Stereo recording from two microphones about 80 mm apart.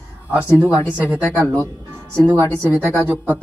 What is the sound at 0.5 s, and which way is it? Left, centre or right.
Speech, right.